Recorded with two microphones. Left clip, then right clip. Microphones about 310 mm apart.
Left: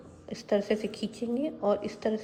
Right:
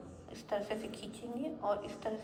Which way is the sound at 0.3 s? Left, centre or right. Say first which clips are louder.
Left 9 dB; centre.